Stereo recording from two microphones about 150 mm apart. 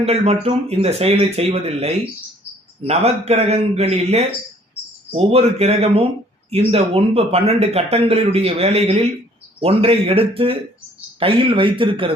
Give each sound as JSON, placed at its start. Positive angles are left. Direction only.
{"t": 0.0, "sound": "speech", "side_deg": -45}